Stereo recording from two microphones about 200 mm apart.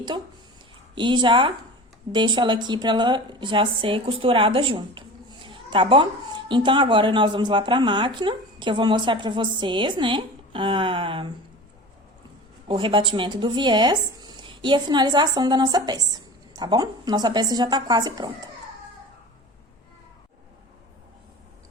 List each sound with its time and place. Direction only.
0.9 s speech: 25° right (ahead or behind)
12.6 s speech: 25° right (ahead or behind)